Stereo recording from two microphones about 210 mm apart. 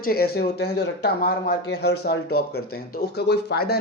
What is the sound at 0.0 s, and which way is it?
Speech, 45° left (ahead or behind).